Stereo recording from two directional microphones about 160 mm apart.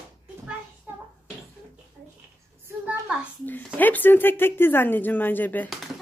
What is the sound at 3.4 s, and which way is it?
Speech, 10° left (ahead or behind).